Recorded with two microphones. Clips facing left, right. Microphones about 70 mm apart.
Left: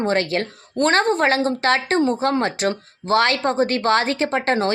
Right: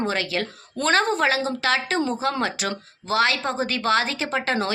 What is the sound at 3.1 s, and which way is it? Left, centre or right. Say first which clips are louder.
A woman's voice: left 4 dB; left.